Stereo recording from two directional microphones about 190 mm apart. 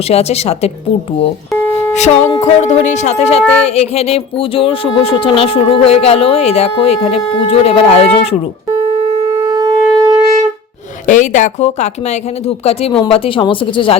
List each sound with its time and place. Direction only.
0.1 s speech: 35° left (ahead or behind)
1.9 s a sound: 35° left (ahead or behind)
2.2 s music: 15° left (ahead or behind)
2.6 s speech: 40° left (ahead or behind)
3.4 s child singing: 5° left (ahead or behind)
3.8 s speech: 35° left (ahead or behind)
9.5 s shofar: 20° right (ahead or behind)
11.0 s speech: 40° left (ahead or behind)